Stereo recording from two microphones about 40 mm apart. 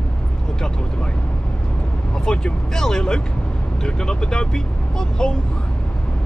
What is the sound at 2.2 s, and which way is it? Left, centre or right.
Speech, left.